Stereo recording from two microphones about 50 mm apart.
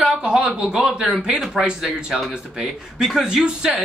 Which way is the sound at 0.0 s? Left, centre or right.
Centre.